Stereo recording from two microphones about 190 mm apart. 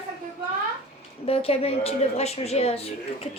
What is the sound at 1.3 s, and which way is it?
A woman's voice, 30° left (ahead or behind).